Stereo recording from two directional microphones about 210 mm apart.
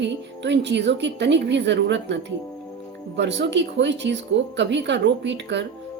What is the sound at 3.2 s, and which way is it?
Speech, 55° right (ahead or behind).